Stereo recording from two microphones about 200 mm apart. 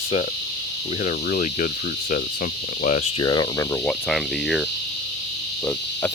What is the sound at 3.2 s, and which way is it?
Cricket, 20° left (ahead or behind).